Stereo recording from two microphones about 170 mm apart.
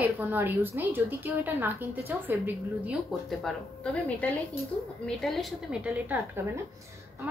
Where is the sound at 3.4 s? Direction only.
10° left (ahead or behind).